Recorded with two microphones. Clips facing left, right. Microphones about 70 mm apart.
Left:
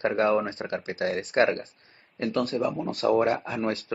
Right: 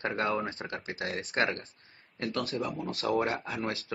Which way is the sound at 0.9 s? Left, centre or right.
Left.